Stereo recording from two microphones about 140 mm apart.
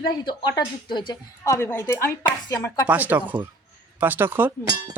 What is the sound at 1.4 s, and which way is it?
Speech, 20° left (ahead or behind).